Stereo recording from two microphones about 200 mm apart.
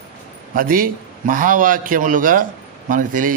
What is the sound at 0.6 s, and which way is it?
A man's voice, 45° right (ahead or behind).